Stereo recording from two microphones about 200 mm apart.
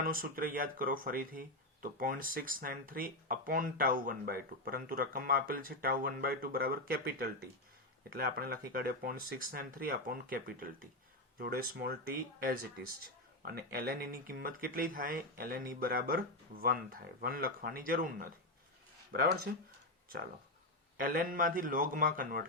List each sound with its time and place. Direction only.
0.0 s speech: 45° right (ahead or behind)
19.1 s speech: 60° right (ahead or behind)
21.0 s speech: 45° right (ahead or behind)